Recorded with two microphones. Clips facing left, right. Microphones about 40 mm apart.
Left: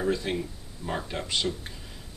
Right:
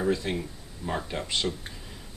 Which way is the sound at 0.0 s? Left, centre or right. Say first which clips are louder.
Even; centre.